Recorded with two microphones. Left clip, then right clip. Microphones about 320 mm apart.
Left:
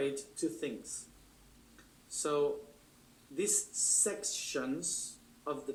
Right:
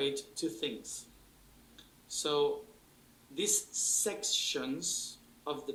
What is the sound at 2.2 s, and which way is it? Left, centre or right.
Speech, centre.